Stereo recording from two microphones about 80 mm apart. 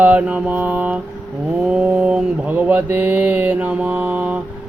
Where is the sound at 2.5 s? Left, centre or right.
Right.